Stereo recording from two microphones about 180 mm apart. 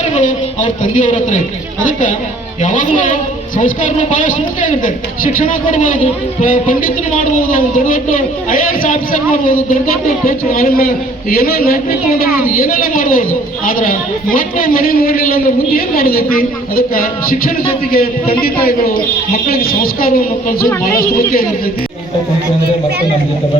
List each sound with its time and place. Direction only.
0.1 s a man's voice: 45° left (ahead or behind)